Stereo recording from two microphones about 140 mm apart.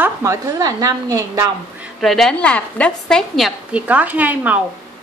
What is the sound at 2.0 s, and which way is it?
A woman's voice, centre (ahead or behind).